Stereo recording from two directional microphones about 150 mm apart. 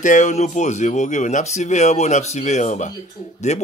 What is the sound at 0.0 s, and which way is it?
Speech, 55° left (ahead or behind).